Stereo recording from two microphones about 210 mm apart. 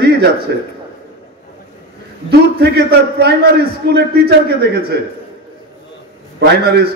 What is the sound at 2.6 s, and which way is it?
A man's voice, 50° right (ahead or behind).